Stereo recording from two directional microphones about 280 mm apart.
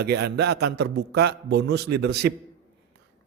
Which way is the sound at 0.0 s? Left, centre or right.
Right.